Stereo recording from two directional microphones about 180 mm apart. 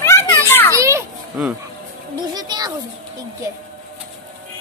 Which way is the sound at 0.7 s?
15° right (ahead or behind).